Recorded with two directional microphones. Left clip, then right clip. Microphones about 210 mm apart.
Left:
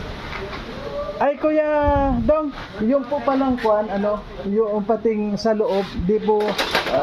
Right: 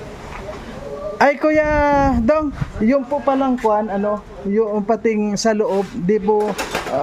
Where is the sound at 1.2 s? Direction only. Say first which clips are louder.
Right 4 dB; 35° right (ahead or behind).